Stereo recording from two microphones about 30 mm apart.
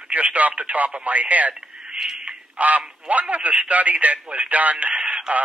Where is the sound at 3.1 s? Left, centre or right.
Right.